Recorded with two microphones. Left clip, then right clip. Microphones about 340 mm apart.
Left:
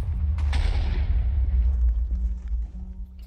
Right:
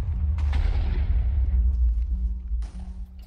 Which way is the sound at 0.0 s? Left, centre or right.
Centre.